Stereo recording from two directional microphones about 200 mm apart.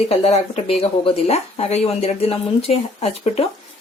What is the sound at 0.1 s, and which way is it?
Speech, 30° left (ahead or behind).